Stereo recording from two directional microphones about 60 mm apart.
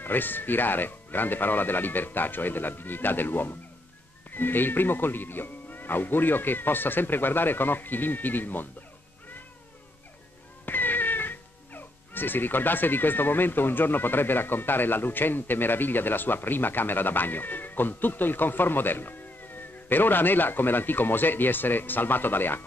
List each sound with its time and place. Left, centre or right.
0.0 s speech: left
10.6 s speech: left